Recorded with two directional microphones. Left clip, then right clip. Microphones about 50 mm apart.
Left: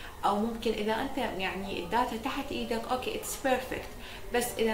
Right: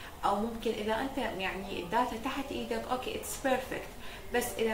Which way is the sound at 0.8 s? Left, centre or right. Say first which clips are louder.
Left 2 dB; centre.